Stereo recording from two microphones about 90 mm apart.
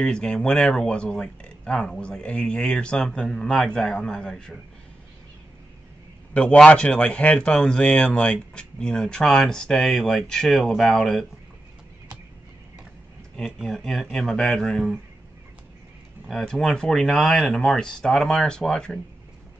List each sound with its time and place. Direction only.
0.0 s a man's voice: 10° left (ahead or behind)
6.3 s a man's voice: 10° left (ahead or behind)
13.6 s speech: 5° left (ahead or behind)
16.3 s speech: 5° left (ahead or behind)